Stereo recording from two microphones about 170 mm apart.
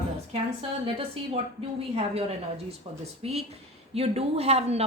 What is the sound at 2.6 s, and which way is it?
Speech, 40° right (ahead or behind).